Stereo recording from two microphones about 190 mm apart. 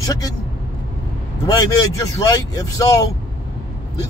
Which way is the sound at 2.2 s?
20° left (ahead or behind).